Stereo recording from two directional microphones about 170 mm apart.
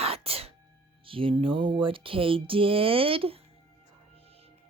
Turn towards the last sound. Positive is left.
turn(degrees=-35)  # may be behind; listen again after turning